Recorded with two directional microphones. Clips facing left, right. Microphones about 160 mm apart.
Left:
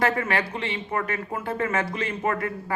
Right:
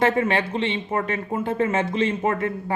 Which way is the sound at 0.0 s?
25° right (ahead or behind).